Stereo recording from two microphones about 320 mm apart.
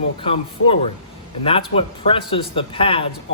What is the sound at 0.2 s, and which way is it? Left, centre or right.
A man's voice, centre.